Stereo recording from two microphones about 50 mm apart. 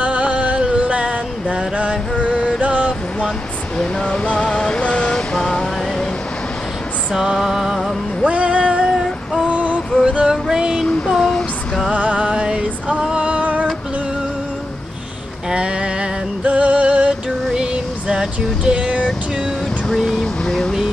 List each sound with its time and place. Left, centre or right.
0.0 s music: right
3.7 s a sound: centre
7.1 s music: centre
8.3 s music: right
9.4 s female singing: right
10.0 s a sound: centre
11.1 s female singing: centre
11.9 s music: right
15.5 s a sound: centre
19.9 s vehicle: centre
20.4 s vehicle: centre